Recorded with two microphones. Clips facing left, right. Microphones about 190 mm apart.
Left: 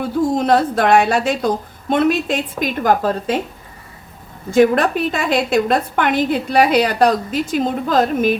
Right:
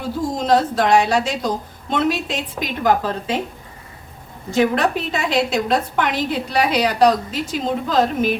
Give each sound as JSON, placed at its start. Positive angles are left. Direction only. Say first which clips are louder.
{"t": 0.3, "sound": "a woman's voice", "louder": "right 1 dB", "side_deg": 60}
{"t": 4.5, "sound": "a woman's voice", "louder": "left 4 dB", "side_deg": 50}